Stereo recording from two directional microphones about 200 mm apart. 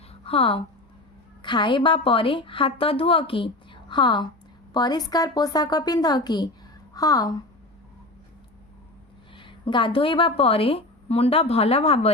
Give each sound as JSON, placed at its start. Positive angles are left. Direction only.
{"t": 0.1, "sound": "a sound", "side_deg": 30}
{"t": 1.4, "sound": "a woman's voice", "side_deg": 25}
{"t": 9.3, "sound": "a woman's voice", "side_deg": 25}